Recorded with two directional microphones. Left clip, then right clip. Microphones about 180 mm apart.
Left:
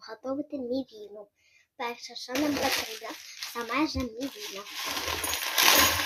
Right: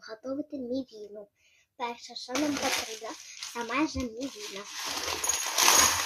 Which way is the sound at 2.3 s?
15° left (ahead or behind).